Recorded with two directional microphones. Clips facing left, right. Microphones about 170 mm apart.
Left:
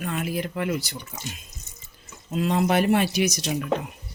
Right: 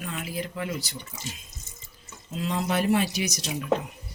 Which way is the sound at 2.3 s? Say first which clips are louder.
Left 6 dB; 60° left (ahead or behind).